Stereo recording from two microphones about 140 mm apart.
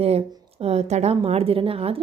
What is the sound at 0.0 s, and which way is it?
Speech, 45° right (ahead or behind).